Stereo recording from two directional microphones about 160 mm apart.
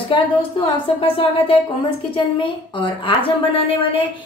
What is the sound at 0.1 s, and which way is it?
A woman's voice, 30° left (ahead or behind).